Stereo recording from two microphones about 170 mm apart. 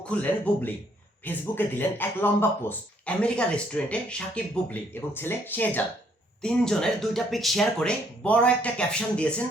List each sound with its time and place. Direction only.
0.0 s speech: 5° left (ahead or behind)